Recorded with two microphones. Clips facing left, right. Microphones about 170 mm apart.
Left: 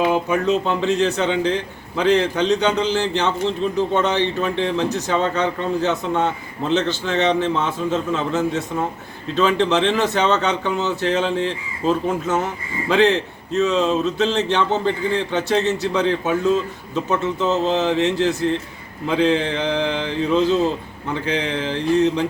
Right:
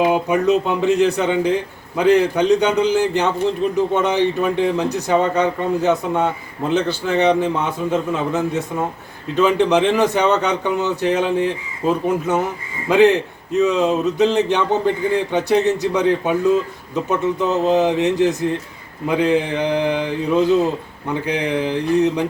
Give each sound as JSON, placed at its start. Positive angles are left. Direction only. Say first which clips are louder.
{"t": 0.1, "sound": "speech", "louder": "right 3 dB", "side_deg": -15}